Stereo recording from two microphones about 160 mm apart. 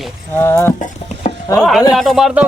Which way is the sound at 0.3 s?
15° left (ahead or behind).